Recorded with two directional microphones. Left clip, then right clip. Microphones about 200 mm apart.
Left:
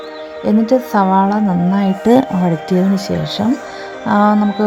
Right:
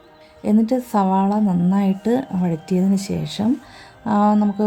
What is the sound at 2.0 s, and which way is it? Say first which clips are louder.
Speech: left 12 dB; 40° left (ahead or behind).